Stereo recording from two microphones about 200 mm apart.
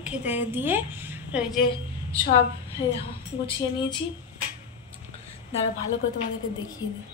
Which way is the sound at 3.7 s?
20° left (ahead or behind).